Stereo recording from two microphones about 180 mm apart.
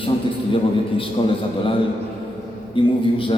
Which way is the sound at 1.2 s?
25° left (ahead or behind).